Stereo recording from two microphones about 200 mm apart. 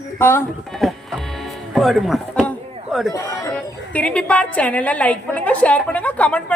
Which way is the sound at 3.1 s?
15° left (ahead or behind).